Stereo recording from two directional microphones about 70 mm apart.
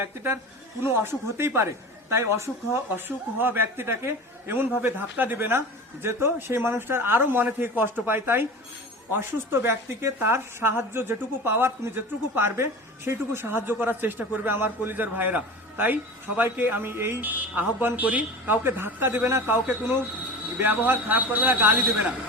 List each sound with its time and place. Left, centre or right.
0.0 s speech: right
9.5 s a woman's voice: right
20.6 s a woman's voice: right